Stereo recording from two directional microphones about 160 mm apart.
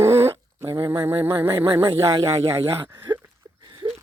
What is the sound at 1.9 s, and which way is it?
Speech, 20° right (ahead or behind).